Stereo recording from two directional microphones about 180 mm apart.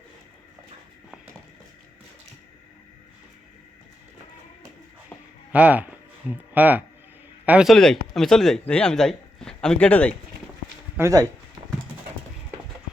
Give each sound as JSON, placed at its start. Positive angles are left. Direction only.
{"t": 5.5, "sound": "speech", "side_deg": -10}
{"t": 10.9, "sound": "speech", "side_deg": -15}